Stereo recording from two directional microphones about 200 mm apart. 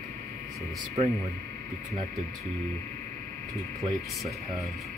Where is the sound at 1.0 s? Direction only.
30° right (ahead or behind).